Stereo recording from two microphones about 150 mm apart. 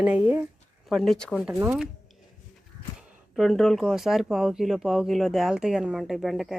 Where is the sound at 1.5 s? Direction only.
10° right (ahead or behind).